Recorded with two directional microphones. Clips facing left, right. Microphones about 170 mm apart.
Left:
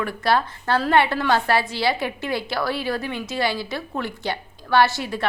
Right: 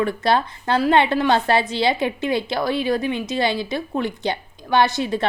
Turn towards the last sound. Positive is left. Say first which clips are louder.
# right 1 dB
turn(degrees=-20)  # may be behind; listen again after turning